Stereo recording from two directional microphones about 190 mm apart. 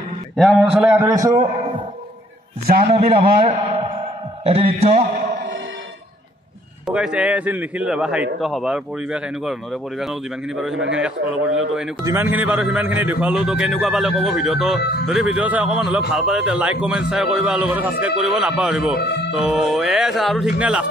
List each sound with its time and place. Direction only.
0.4 s a man's voice: centre (ahead or behind); by 1.3 s 15° right (ahead or behind)
2.6 s a man's voice: 50° right (ahead or behind)
3.1 s a man's voice: 30° right (ahead or behind)
6.9 s a man's voice: 5° right (ahead or behind)
10.7 s a man's voice: 75° right (ahead or behind)
11.0 s a man's voice: 5° right (ahead or behind)
14.8 s speech: 60° left (ahead or behind)
15.0 s a man's voice: 5° right (ahead or behind)
18.9 s speech: 55° left (ahead or behind)
19.3 s a man's voice: 5° right (ahead or behind)